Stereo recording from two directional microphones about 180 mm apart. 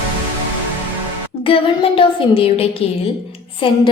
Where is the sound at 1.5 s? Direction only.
30° left (ahead or behind).